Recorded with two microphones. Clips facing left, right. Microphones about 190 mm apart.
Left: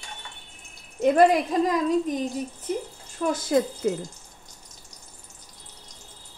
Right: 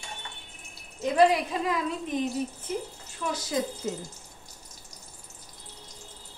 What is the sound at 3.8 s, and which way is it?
Speech, 65° left (ahead or behind).